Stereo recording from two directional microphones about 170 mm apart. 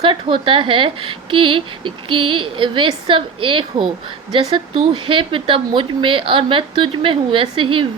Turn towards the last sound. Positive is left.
turn(degrees=-30)  # may be behind; listen again after turning